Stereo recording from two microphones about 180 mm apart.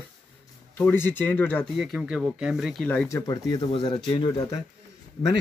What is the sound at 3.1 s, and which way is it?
Speech, 20° left (ahead or behind).